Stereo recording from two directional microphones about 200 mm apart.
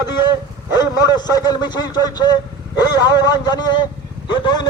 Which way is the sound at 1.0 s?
20° left (ahead or behind).